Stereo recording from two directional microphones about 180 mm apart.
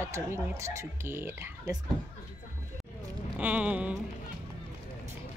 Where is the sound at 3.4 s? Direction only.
10° right (ahead or behind).